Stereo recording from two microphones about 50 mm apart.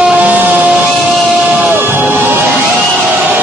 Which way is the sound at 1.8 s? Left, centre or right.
Right.